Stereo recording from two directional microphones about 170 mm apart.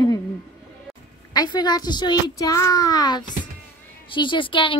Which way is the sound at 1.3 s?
25° left (ahead or behind).